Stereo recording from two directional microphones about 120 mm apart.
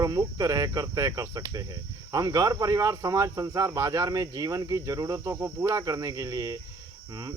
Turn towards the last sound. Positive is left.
turn(degrees=-30)  # may be behind; listen again after turning